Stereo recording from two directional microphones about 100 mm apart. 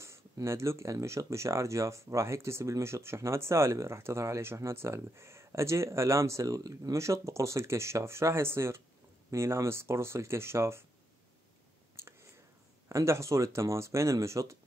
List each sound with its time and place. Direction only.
0.0 s speech: 30° right (ahead or behind)
12.8 s speech: 30° right (ahead or behind)